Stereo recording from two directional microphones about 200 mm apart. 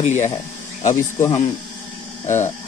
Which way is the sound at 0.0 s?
35° left (ahead or behind).